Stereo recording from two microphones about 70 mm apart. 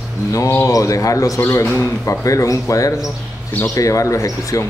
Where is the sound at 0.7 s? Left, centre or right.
Left.